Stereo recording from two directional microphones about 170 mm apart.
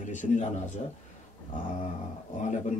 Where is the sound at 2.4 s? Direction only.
45° left (ahead or behind).